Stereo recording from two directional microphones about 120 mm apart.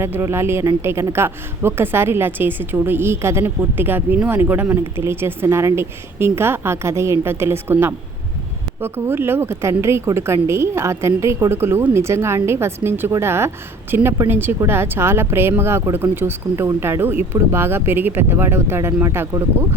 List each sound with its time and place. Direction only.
0.0 s a woman's voice: 20° right (ahead or behind)